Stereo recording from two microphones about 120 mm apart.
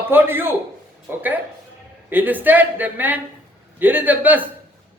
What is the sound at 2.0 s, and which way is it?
A man's voice, 15° right (ahead or behind).